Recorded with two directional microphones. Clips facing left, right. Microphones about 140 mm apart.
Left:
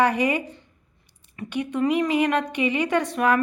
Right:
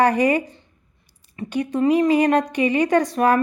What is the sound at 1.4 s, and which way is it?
A woman's voice, 30° right (ahead or behind).